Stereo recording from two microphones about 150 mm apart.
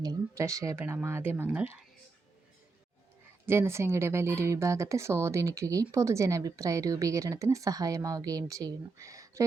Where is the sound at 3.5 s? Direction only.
15° right (ahead or behind).